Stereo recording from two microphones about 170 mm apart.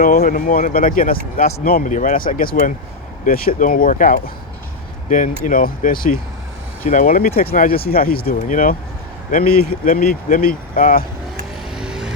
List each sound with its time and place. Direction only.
0.0 s speech: 55° left (ahead or behind)
11.7 s music: 5° right (ahead or behind)